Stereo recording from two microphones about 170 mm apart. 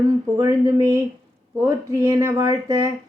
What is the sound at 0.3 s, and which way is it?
A woman's voice, 20° right (ahead or behind).